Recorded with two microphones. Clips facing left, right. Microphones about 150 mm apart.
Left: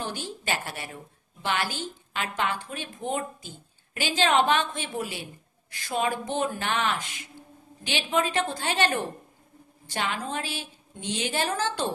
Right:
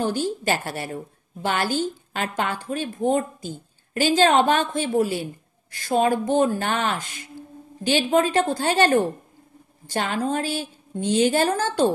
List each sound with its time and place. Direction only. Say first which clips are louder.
0.0 s a woman's voice: right 10 dB; 40° right (ahead or behind)